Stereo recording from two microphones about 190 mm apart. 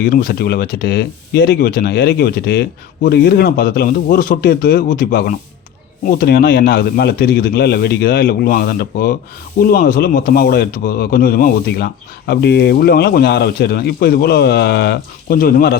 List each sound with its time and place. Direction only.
0.0 s speech: 50° left (ahead or behind)